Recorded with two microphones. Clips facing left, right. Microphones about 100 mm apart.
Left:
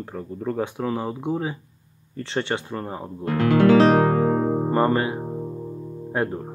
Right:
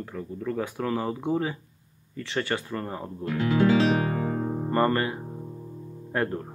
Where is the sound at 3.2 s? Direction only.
60° left (ahead or behind); by 4.7 s 75° left (ahead or behind).